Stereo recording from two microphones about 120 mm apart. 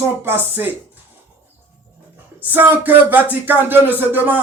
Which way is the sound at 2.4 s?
15° right (ahead or behind).